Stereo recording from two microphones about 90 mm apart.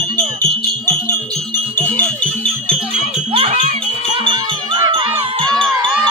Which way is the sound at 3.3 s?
90° right.